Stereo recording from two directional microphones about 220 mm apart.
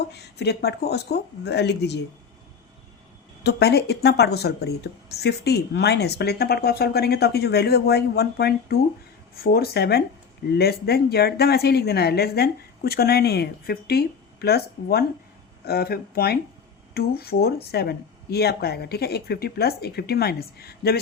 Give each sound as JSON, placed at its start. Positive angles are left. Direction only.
{"t": 0.0, "sound": "speech", "side_deg": 50}
{"t": 3.4, "sound": "speech", "side_deg": 45}